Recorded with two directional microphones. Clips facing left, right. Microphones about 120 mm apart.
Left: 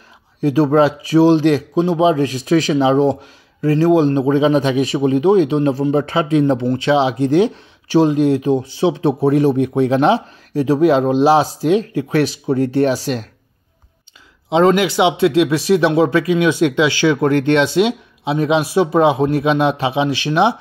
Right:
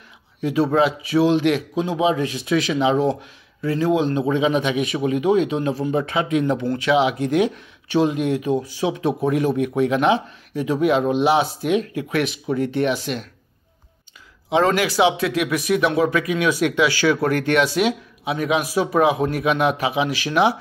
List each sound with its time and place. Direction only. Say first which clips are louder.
0.4 s speech: left 5 dB; 40° left (ahead or behind)
14.5 s speech: left 5 dB; 25° left (ahead or behind)